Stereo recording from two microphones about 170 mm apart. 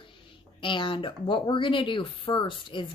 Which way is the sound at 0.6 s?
30° left (ahead or behind).